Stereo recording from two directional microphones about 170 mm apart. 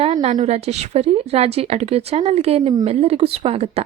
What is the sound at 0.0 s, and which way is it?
A woman's voice, 40° right (ahead or behind).